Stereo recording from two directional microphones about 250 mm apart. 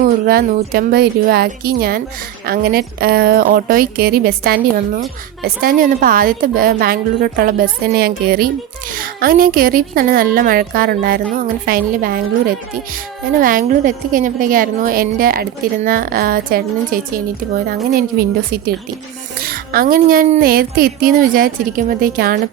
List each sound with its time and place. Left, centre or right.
0.0 s a woman's voice: right
19.4 s a woman's voice: right